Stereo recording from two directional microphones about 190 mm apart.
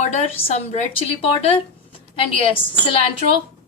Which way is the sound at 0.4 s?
35° left (ahead or behind).